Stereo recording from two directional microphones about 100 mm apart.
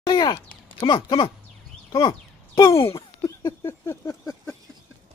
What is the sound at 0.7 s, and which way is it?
Speech, 55° left (ahead or behind).